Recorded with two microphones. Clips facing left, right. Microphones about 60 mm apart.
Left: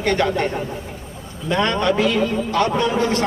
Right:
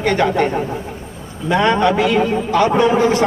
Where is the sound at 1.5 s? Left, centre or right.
Centre.